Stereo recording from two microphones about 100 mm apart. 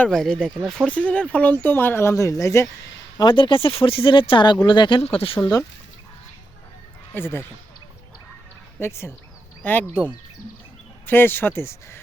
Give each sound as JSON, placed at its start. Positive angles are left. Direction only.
{"t": 0.1, "sound": "speech", "side_deg": 5}
{"t": 3.2, "sound": "speech", "side_deg": 50}
{"t": 5.0, "sound": "speech", "side_deg": 70}
{"t": 5.4, "sound": "speech", "side_deg": 30}
{"t": 7.1, "sound": "speech", "side_deg": 20}
{"t": 8.8, "sound": "speech", "side_deg": 25}
{"t": 11.0, "sound": "speech", "side_deg": 20}